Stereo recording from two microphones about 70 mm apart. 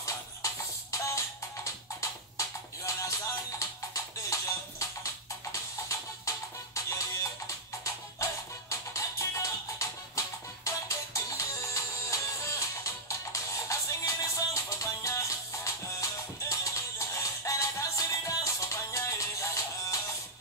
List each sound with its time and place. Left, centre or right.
0.9 s music: left